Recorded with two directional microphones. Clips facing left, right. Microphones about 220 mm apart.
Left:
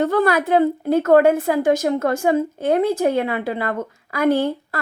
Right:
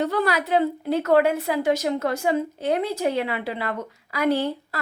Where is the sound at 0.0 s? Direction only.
50° left (ahead or behind).